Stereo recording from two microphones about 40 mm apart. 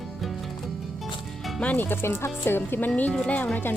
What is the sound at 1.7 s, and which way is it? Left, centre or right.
Speech, left.